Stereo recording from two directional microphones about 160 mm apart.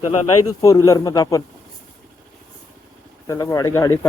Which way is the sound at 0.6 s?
20° left (ahead or behind).